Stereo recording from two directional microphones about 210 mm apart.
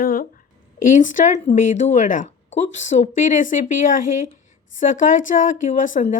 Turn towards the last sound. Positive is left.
turn(degrees=40)  # may be behind; listen again after turning